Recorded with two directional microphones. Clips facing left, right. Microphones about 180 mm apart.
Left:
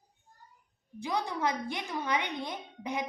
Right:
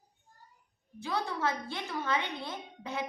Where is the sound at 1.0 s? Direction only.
15° left (ahead or behind).